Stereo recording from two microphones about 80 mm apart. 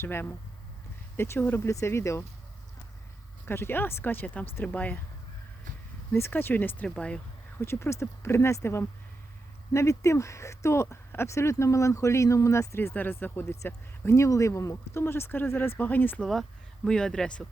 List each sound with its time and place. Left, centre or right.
0.0 s speech: left
3.4 s speech: left
6.1 s speech: left
6.8 s speech: centre
7.6 s speech: left
12.9 s speech: left
14.9 s speech: left
16.2 s speech: centre